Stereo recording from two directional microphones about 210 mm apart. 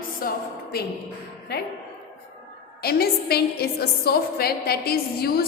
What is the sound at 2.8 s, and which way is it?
A woman's voice, 50° left (ahead or behind).